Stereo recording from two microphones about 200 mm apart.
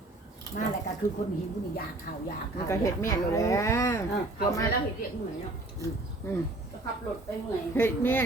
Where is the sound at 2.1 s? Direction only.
45° left (ahead or behind).